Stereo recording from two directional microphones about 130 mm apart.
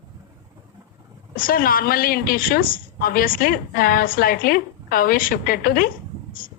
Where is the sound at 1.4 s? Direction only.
90° left.